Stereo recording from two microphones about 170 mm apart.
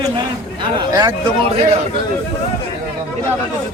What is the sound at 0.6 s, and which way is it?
Speech, 25° right (ahead or behind).